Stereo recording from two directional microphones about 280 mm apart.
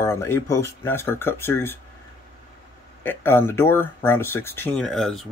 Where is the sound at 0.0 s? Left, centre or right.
Centre.